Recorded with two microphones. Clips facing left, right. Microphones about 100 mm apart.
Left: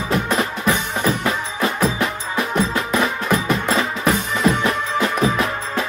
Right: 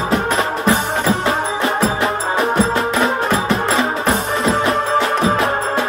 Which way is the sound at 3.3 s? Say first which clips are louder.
Right 2 dB; 30° right (ahead or behind).